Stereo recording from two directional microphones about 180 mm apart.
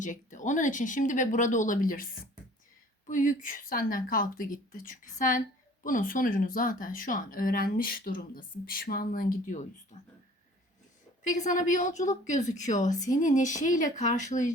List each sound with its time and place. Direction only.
0.0 s speech: 45° left (ahead or behind)
3.1 s speech: 45° left (ahead or behind)
11.2 s speech: 45° left (ahead or behind)